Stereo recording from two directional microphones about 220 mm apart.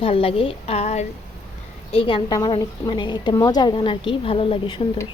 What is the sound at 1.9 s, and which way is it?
A woman's voice, 25° left (ahead or behind).